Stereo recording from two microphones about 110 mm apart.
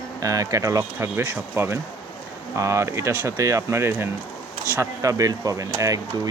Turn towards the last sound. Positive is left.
turn(degrees=-30)  # may be behind; listen again after turning